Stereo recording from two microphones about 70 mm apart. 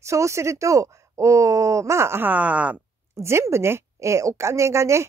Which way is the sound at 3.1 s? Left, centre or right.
Right.